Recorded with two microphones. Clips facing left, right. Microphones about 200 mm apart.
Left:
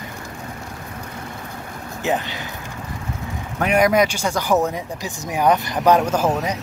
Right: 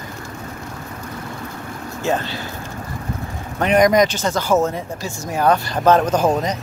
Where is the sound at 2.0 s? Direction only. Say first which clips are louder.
Right 1 dB; 15° left (ahead or behind).